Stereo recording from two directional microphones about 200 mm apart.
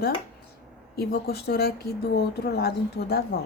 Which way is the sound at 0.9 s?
55° left (ahead or behind).